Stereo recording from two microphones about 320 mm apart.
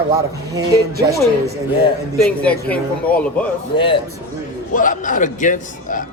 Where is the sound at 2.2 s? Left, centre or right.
Centre.